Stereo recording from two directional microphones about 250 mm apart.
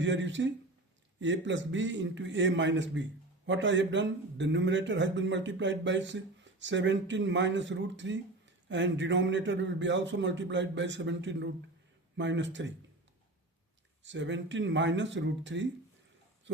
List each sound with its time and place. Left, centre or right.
0.0 s a man's voice: right
14.0 s a man's voice: right